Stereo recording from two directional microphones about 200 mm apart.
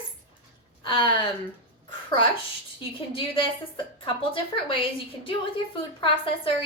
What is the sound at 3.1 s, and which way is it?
A woman's voice, 25° left (ahead or behind).